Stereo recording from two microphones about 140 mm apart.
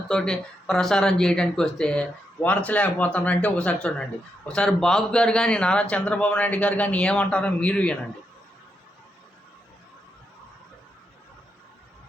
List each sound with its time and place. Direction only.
0.1 s speech: 5° left (ahead or behind)